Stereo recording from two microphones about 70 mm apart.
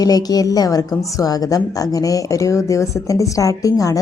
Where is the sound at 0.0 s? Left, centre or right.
Left.